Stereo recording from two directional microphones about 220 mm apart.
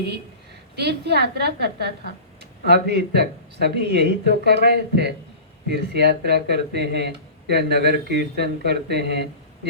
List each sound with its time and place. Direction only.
0.8 s speech: 50° right (ahead or behind)